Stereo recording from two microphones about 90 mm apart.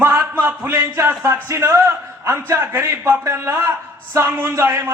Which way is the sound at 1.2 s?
30° right (ahead or behind).